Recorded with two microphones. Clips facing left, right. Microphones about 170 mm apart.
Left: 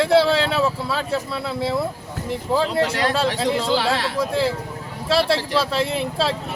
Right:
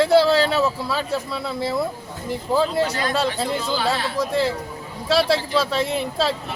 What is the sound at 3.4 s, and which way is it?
Speech, 85° left.